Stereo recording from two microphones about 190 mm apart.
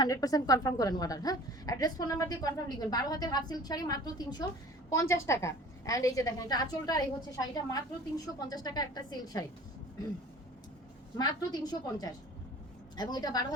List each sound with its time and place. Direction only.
0.0 s a woman's voice: 20° left (ahead or behind)
11.2 s a woman's voice: 20° left (ahead or behind)